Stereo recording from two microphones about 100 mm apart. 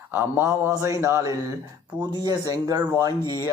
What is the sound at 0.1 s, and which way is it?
A man's voice, 20° right (ahead or behind).